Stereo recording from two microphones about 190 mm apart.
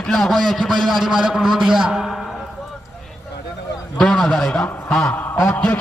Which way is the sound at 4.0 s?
5° left (ahead or behind).